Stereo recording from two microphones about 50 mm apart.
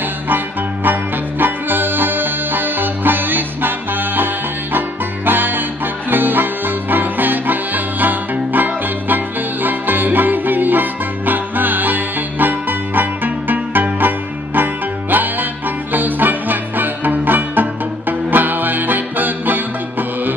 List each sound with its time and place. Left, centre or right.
1.4 s music: right